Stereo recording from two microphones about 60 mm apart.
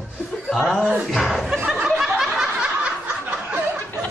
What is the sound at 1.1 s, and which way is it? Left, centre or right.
Speech, centre.